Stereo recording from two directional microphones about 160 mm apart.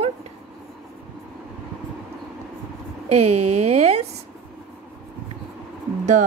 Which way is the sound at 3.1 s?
40° right (ahead or behind).